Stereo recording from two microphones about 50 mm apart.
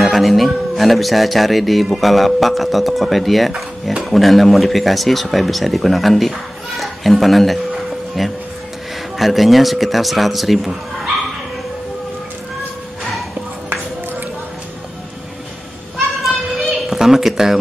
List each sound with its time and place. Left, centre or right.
0.0 s speech: centre
6.8 s music: centre
9.2 s speech: centre
16.5 s a sound: centre